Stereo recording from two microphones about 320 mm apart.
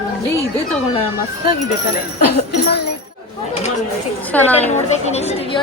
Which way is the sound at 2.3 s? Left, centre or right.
Left.